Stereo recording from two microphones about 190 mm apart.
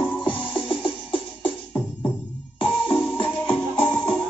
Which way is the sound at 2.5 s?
30° left (ahead or behind).